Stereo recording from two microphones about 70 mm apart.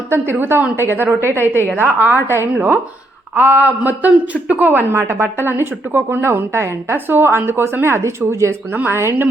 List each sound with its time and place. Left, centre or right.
0.1 s a woman's voice: right
8.7 s a woman's voice: right